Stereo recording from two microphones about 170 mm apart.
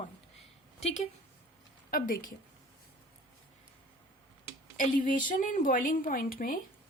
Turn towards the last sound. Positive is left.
turn(degrees=55)  # may be behind; listen again after turning